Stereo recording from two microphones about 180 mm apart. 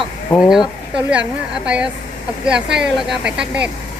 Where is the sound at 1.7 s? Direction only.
5° right (ahead or behind).